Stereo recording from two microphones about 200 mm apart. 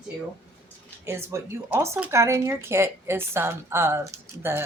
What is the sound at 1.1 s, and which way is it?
Speech, 15° right (ahead or behind).